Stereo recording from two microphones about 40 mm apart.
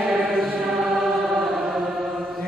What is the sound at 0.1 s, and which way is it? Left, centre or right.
Chant, centre.